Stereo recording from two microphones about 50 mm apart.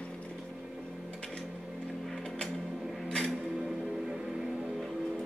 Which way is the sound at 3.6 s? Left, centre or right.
Centre.